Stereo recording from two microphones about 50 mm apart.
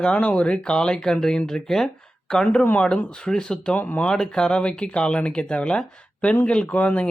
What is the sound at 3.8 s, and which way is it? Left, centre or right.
Speech, left.